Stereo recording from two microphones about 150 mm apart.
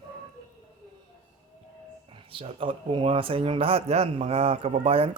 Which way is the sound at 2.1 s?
35° right (ahead or behind).